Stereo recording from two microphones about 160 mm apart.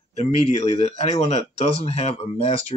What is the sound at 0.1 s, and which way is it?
Speech, 40° left (ahead or behind).